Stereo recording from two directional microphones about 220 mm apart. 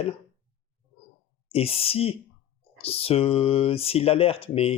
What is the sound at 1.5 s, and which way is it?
Speech, 25° left (ahead or behind).